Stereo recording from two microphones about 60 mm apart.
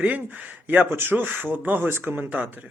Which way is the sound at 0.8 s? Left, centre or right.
Right.